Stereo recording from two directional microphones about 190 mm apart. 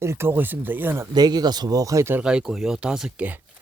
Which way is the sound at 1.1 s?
20° right (ahead or behind).